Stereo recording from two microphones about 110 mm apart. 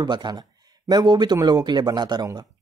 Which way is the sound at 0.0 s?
40° right (ahead or behind).